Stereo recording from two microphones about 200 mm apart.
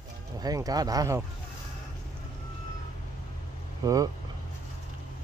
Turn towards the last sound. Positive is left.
turn(degrees=-15)  # may be behind; listen again after turning